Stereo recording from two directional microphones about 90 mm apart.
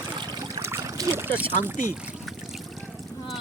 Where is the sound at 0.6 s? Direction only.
35° right (ahead or behind).